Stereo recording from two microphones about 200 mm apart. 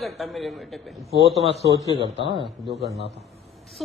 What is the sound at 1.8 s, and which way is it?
Speech, 25° right (ahead or behind).